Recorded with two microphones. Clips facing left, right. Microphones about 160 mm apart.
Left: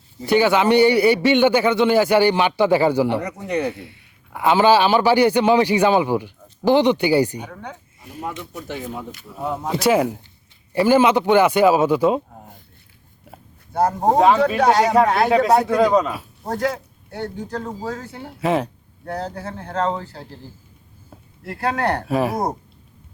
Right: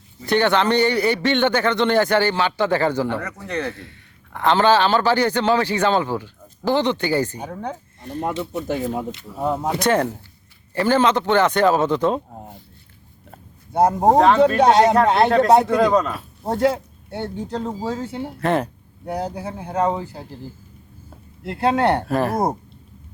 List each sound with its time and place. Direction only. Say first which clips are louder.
0.3 s a man's voice: left 2 dB; 5° left (ahead or behind)
7.3 s speech: right 4 dB; 35° right (ahead or behind)
8.6 s speech: right 5 dB; 40° right (ahead or behind)
9.3 s a man's voice: right 2 dB; centre (ahead or behind)
13.7 s speech: right 2 dB; 20° right (ahead or behind)
14.2 s a man's voice: even; 5° left (ahead or behind)
14.6 s speech: right 1 dB; 25° right (ahead or behind)
15.3 s a man's voice: right 1 dB; centre (ahead or behind)
16.4 s speech: right 4 dB; 25° right (ahead or behind)
18.3 s a man's voice: left 1 dB; centre (ahead or behind)
19.0 s speech: right 2 dB; 15° right (ahead or behind)
21.4 s speech: right 4 dB; 25° right (ahead or behind)
22.0 s a man's voice: even; 5° left (ahead or behind)